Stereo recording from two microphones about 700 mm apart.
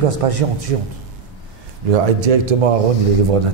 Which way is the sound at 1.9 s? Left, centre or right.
Right.